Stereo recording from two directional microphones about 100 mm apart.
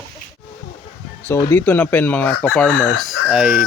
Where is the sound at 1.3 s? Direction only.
20° left (ahead or behind).